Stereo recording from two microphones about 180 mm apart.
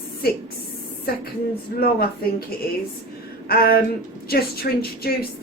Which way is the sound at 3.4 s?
60° left (ahead or behind).